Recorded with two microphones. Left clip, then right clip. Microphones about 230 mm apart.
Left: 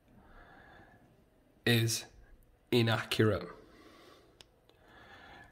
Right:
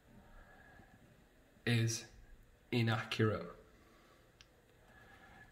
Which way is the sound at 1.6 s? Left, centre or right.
Left.